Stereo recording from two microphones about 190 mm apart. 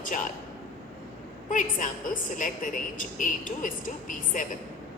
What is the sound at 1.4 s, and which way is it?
A woman's voice, 45° left (ahead or behind).